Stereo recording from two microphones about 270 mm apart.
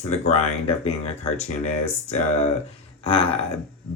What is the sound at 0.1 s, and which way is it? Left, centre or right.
Speech, left.